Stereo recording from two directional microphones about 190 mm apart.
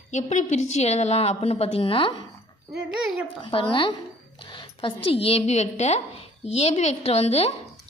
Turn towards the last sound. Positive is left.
turn(degrees=35)  # may be behind; listen again after turning